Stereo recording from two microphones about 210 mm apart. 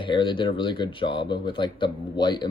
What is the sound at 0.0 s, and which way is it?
Speech, 25° left (ahead or behind).